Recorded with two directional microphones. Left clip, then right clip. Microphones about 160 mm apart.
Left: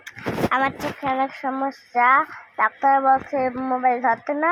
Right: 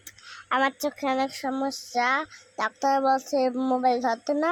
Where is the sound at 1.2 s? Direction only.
20° right (ahead or behind).